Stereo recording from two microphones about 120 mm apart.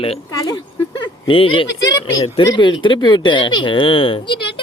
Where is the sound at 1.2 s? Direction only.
45° left (ahead or behind).